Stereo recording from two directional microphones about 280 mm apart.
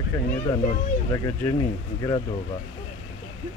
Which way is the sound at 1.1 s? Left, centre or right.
Centre.